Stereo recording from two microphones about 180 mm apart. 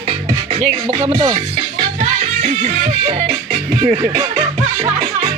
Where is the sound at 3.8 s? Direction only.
35° right (ahead or behind).